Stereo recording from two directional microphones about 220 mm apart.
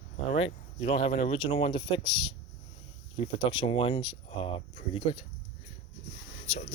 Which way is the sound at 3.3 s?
25° left (ahead or behind).